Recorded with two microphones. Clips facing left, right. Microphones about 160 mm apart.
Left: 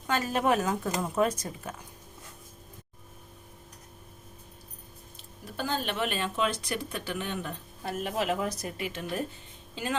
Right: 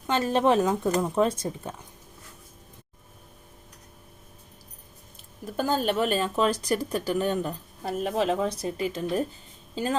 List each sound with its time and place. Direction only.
0.1 s speech: 30° right (ahead or behind)
5.5 s speech: 45° right (ahead or behind)